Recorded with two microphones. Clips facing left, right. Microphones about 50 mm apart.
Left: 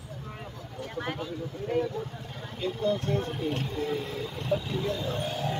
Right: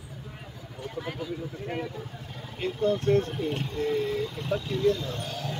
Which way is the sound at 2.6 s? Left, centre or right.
Centre.